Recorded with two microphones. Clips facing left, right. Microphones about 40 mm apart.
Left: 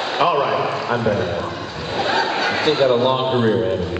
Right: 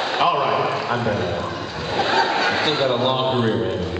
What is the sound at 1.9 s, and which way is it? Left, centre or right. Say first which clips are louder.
Snicker: right 1 dB; centre.